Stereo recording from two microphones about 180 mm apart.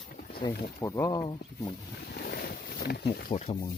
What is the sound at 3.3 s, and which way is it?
Speech, 40° left (ahead or behind).